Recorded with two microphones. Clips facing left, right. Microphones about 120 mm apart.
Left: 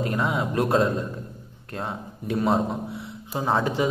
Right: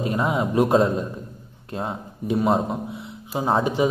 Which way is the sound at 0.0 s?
25° right (ahead or behind).